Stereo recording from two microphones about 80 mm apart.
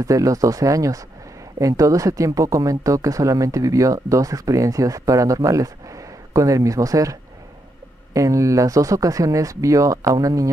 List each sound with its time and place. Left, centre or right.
0.0 s speech: right